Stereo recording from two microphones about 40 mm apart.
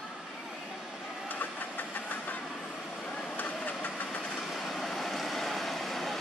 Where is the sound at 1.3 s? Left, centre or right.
Left.